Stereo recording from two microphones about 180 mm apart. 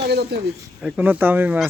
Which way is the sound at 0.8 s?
5° right (ahead or behind).